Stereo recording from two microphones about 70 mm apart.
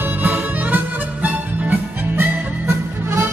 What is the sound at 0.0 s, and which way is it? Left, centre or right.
Music, right.